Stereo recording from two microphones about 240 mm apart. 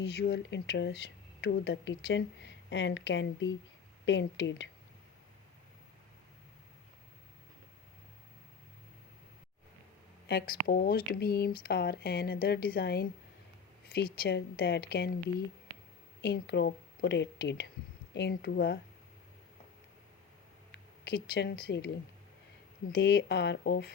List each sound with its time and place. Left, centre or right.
0.0 s a woman's voice: left
10.2 s a woman's voice: left
16.2 s a woman's voice: left
20.7 s speech: left
22.9 s a woman's voice: left